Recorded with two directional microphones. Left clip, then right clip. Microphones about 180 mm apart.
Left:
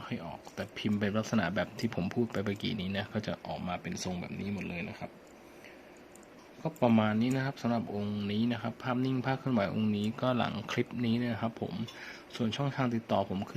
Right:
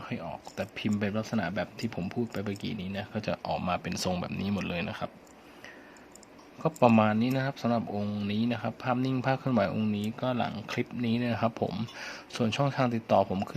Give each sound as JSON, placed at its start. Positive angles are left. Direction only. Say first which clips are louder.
{"t": 0.0, "sound": "a sound", "louder": "right 3 dB", "side_deg": -10}
{"t": 0.9, "sound": "speech", "louder": "left 1 dB", "side_deg": 0}
{"t": 3.3, "sound": "speech", "louder": "right 7 dB", "side_deg": -20}
{"t": 6.6, "sound": "speech", "louder": "right 6 dB", "side_deg": -25}
{"t": 6.9, "sound": "speech", "louder": "right 4 dB", "side_deg": -15}
{"t": 9.6, "sound": "speech", "louder": "right 2 dB", "side_deg": -5}
{"t": 11.3, "sound": "speech", "louder": "right 7 dB", "side_deg": -15}